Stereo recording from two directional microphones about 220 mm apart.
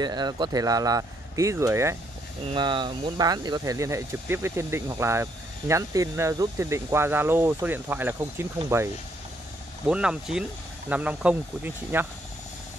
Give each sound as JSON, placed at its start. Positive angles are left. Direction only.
{"t": 0.0, "sound": "speech", "side_deg": -20}